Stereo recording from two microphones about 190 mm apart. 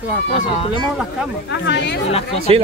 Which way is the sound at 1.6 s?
65° left (ahead or behind).